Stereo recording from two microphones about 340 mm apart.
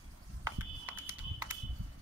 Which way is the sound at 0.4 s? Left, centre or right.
Centre.